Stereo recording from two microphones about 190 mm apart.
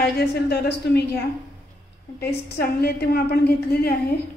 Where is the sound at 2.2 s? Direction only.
55° left (ahead or behind).